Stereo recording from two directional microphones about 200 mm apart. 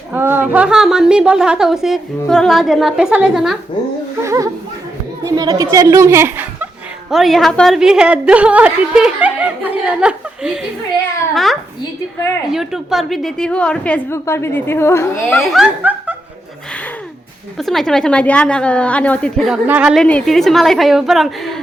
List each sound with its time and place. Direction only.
0.1 s a woman's voice: 10° right (ahead or behind)
4.2 s a woman's voice: 15° right (ahead or behind)
12.5 s a woman's voice: centre (ahead or behind)
15.4 s speech: 5° right (ahead or behind)
17.6 s a woman's voice: centre (ahead or behind)
19.6 s a woman's voice: 5° right (ahead or behind)